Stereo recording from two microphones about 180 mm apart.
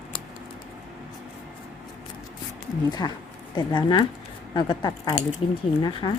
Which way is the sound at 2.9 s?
25° left (ahead or behind).